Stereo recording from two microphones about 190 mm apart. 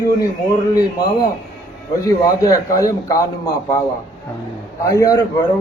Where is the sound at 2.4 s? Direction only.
15° left (ahead or behind).